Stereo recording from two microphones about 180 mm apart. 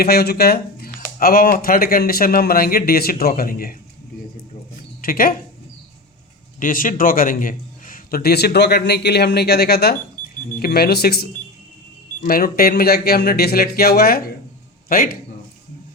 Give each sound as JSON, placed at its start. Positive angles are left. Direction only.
{"t": 0.0, "sound": "a man's voice", "side_deg": 60}
{"t": 5.0, "sound": "speech", "side_deg": 50}
{"t": 6.6, "sound": "a man's voice", "side_deg": 50}